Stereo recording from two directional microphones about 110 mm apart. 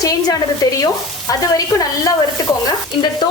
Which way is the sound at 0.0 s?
35° left (ahead or behind).